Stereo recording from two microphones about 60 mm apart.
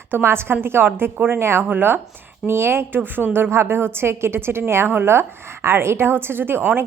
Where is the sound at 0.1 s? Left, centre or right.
Right.